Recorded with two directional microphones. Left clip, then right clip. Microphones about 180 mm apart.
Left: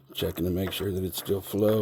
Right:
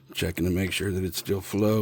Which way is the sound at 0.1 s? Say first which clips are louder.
Right 1 dB; 35° right (ahead or behind).